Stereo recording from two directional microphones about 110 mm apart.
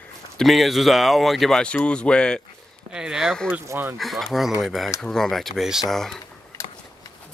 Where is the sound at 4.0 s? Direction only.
Centre (ahead or behind).